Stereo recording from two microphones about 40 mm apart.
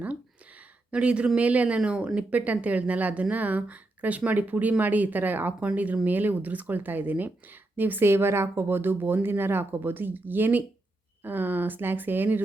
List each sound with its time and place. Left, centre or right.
0.9 s speech: right
5.5 s speech: right
7.8 s speech: right